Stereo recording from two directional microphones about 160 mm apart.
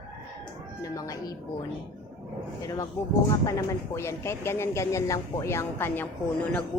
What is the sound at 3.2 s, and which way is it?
Speech, 20° left (ahead or behind).